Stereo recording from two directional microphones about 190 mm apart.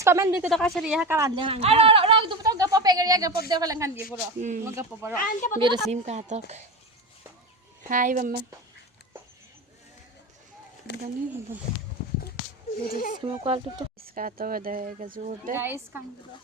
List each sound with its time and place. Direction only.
0.0 s speech: 15° right (ahead or behind)
0.5 s a woman's voice: centre (ahead or behind)
1.4 s a sound: 30° right (ahead or behind)
3.5 s speech: 20° right (ahead or behind)
4.4 s speech: 40° right (ahead or behind)
4.6 s speech: 15° right (ahead or behind)
5.2 s a woman's voice: 45° left (ahead or behind)
5.5 s speech: 25° right (ahead or behind)
5.9 s speech: 35° right (ahead or behind)
7.9 s speech: 45° right (ahead or behind)
12.9 s a woman's voice: 45° left (ahead or behind)
13.2 s speech: 30° right (ahead or behind)
14.0 s speech: 50° right (ahead or behind)
15.5 s speech: 10° right (ahead or behind)